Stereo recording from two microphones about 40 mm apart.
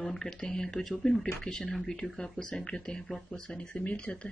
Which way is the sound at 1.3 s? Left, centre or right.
Left.